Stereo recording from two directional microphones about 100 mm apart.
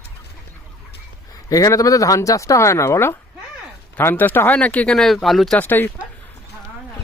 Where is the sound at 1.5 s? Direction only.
35° left (ahead or behind); by 5.5 s centre (ahead or behind).